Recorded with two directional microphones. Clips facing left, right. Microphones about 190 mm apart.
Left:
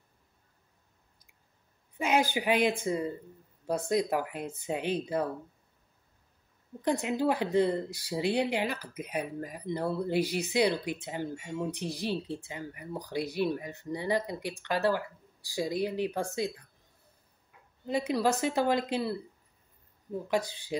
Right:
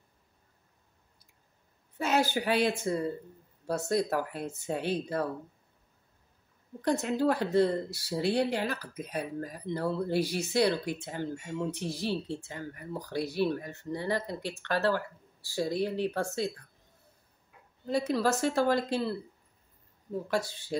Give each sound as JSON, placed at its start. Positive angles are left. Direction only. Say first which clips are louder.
{"t": 2.0, "sound": "speech", "louder": "even", "side_deg": 15}
{"t": 6.8, "sound": "speech", "louder": "right 1 dB", "side_deg": 15}
{"t": 17.8, "sound": "speech", "louder": "even", "side_deg": 15}
{"t": 20.2, "sound": "speech", "louder": "left 2 dB", "side_deg": 15}